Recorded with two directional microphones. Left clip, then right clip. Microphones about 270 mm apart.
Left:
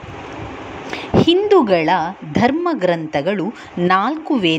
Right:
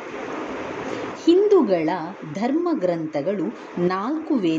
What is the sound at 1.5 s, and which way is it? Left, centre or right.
A woman's voice, centre.